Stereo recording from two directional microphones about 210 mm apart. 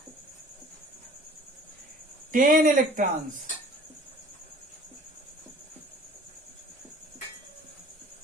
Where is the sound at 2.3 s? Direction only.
40° right (ahead or behind).